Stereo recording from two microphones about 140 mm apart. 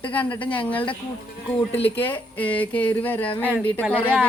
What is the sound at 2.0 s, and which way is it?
Speech, 15° left (ahead or behind).